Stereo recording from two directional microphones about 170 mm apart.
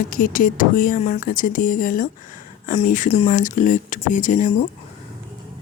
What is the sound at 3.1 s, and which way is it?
Speech, 35° left (ahead or behind).